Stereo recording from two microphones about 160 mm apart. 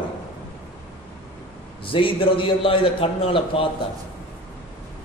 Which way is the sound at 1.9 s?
35° left (ahead or behind).